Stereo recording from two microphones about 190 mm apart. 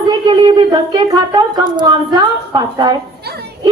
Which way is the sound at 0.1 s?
25° right (ahead or behind).